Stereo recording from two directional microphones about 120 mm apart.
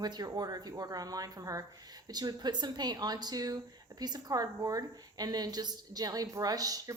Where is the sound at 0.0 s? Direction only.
35° right (ahead or behind).